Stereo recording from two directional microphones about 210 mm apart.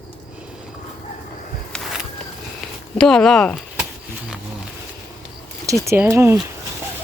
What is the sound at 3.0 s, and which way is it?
Speech, 5° left (ahead or behind).